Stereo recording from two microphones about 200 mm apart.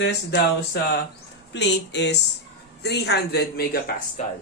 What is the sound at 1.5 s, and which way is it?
A man's voice, 60° left (ahead or behind).